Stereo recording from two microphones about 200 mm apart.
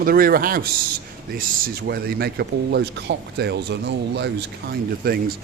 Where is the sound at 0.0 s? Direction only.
45° right (ahead or behind).